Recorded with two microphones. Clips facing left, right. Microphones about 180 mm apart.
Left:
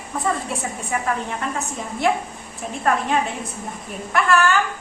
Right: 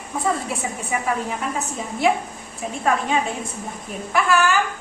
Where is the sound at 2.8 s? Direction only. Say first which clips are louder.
Left 1 dB; centre (ahead or behind).